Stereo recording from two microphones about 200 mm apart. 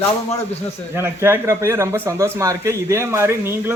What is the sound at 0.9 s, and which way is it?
Speech, 10° right (ahead or behind).